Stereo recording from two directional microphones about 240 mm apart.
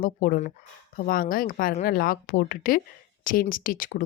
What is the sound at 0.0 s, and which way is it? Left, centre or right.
Speech, left.